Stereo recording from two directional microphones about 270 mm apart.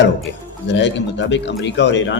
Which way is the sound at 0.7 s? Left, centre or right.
Left.